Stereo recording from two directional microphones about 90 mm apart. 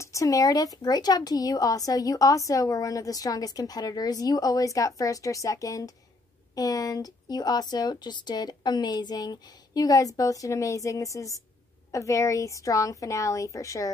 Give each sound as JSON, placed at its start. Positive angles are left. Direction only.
{"t": 0.0, "sound": "a woman's voice", "side_deg": 35}